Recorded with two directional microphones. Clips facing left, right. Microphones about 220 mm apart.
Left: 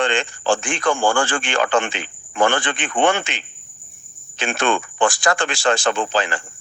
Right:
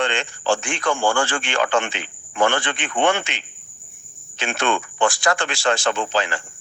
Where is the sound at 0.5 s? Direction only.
50° left (ahead or behind).